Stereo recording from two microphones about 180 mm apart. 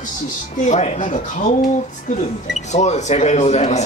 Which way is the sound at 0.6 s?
40° left (ahead or behind).